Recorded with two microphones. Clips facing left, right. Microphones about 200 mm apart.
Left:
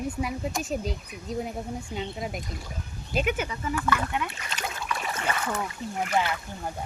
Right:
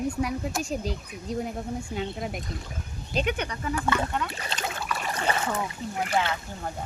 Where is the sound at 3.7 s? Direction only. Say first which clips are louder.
Right 1 dB; 30° right (ahead or behind).